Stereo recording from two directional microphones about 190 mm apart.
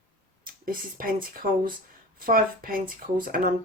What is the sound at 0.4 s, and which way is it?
Speech, 50° right (ahead or behind).